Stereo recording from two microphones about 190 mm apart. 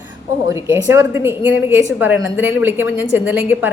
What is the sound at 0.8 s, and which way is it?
Speech, 15° right (ahead or behind).